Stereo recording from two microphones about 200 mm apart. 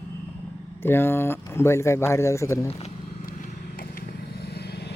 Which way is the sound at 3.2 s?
45° left (ahead or behind).